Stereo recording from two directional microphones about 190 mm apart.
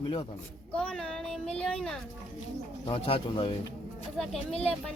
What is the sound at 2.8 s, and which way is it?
Speech, 30° left (ahead or behind).